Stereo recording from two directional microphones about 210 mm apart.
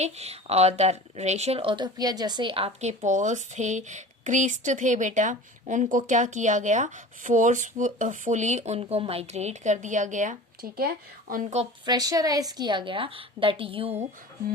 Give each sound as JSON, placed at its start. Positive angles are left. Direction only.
{"t": 0.0, "sound": "speech", "side_deg": -30}
{"t": 11.9, "sound": "a woman's voice", "side_deg": -15}